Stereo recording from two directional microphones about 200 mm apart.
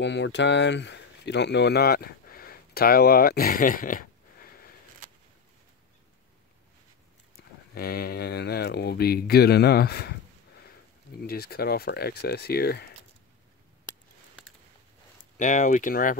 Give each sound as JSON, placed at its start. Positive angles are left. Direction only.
{"t": 0.0, "sound": "speech", "side_deg": 60}
{"t": 5.0, "sound": "a sound", "side_deg": -40}
{"t": 7.7, "sound": "speech", "side_deg": 50}
{"t": 11.2, "sound": "speech", "side_deg": 50}
{"t": 15.3, "sound": "speech", "side_deg": 40}